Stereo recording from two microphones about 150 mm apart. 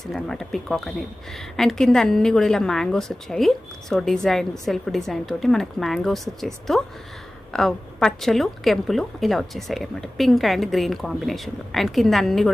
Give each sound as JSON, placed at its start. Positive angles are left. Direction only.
{"t": 0.0, "sound": "speech", "side_deg": 5}